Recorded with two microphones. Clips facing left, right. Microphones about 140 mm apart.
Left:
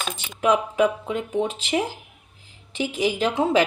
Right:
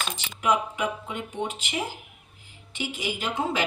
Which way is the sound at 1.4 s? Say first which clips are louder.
Left 7 dB; 90° left.